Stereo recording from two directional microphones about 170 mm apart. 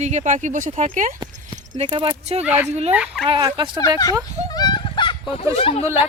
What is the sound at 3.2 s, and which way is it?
Speech, 30° right (ahead or behind).